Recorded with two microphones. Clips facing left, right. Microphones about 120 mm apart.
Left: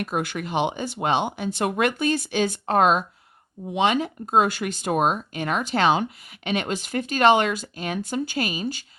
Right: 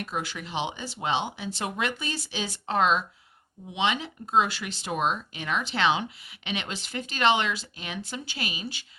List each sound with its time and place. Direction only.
0.0 s speech: 55° left (ahead or behind)